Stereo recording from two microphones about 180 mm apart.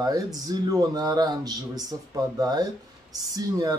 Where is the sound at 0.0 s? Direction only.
20° right (ahead or behind).